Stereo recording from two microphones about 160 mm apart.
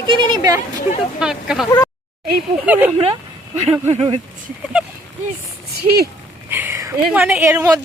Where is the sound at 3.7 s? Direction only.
40° right (ahead or behind).